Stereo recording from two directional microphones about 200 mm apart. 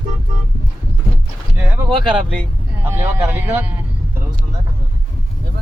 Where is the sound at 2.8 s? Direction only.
10° right (ahead or behind).